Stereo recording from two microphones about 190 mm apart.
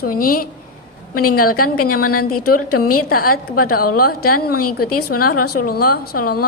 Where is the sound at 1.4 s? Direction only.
50° left (ahead or behind).